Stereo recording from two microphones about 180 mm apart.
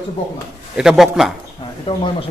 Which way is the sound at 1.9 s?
30° left (ahead or behind).